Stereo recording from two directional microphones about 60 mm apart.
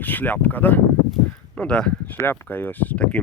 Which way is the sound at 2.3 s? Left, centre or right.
Left.